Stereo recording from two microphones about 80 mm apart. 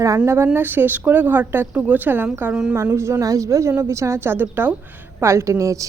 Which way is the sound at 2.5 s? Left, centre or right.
Centre.